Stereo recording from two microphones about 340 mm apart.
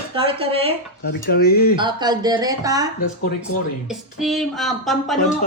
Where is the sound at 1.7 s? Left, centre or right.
Centre.